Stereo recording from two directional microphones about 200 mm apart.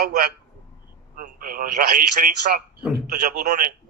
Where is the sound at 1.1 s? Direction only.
45° right (ahead or behind).